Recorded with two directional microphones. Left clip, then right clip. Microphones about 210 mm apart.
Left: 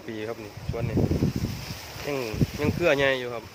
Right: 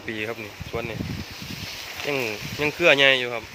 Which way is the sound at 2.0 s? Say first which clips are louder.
Right 3 dB; 20° right (ahead or behind).